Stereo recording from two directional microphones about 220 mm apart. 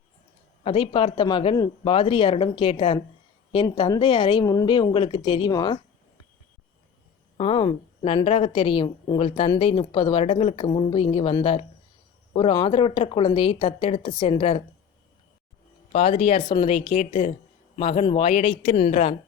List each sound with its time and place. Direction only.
0.6 s a woman's voice: 25° left (ahead or behind)
7.3 s a woman's voice: 25° left (ahead or behind)
15.9 s a woman's voice: 25° left (ahead or behind)